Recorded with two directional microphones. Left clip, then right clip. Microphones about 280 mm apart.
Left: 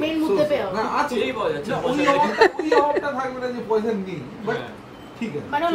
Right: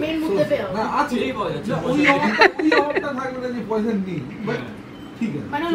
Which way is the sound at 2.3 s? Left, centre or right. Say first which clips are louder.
Right 2 dB; centre.